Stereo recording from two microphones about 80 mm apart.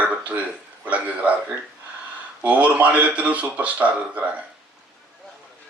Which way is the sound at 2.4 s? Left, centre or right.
Centre.